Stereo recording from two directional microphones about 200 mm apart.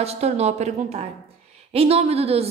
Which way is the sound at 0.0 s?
30° right (ahead or behind).